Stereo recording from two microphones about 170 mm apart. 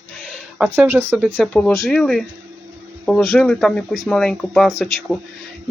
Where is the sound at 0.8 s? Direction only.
15° right (ahead or behind).